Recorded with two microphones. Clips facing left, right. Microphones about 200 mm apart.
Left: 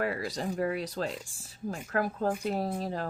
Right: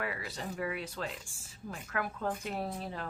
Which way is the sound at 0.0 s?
40° left (ahead or behind).